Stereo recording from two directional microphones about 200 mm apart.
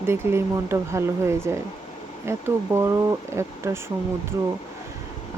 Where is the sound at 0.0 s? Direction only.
10° right (ahead or behind).